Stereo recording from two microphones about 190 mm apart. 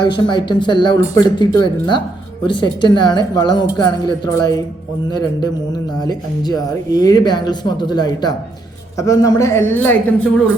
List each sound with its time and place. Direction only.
0.0 s a man's voice: 25° left (ahead or behind)